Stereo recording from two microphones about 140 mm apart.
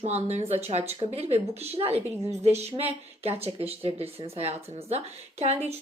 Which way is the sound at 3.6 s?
45° right (ahead or behind).